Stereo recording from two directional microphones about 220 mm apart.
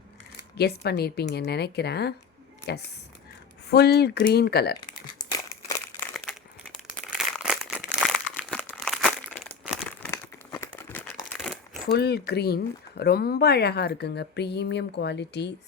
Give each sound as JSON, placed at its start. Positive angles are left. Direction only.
{"t": 0.5, "sound": "speech", "side_deg": 45}
{"t": 3.7, "sound": "speech", "side_deg": 45}
{"t": 7.4, "sound": "crumpling", "side_deg": 0}
{"t": 10.0, "sound": "crumpling", "side_deg": 15}
{"t": 11.9, "sound": "speech", "side_deg": 45}